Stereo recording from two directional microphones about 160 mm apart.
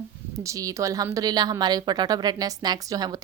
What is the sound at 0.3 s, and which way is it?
A woman's voice, 20° right (ahead or behind).